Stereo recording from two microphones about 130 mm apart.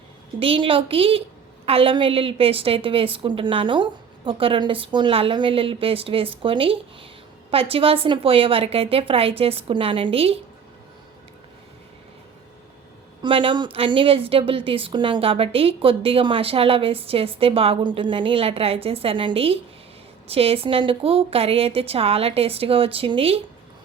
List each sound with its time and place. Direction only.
0.3 s a woman's voice: 45° right (ahead or behind)
13.2 s a woman's voice: 40° right (ahead or behind)